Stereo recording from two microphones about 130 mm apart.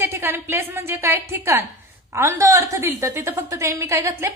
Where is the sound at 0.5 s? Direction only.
15° right (ahead or behind).